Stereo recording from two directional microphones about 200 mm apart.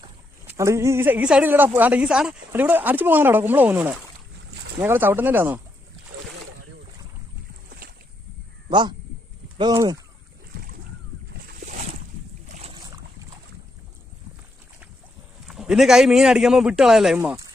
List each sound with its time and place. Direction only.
0.4 s a woman's voice: 15° right (ahead or behind)
8.7 s a woman's voice: 25° right (ahead or behind)
15.4 s a man's voice: centre (ahead or behind)
17.2 s a woman's voice: 15° right (ahead or behind)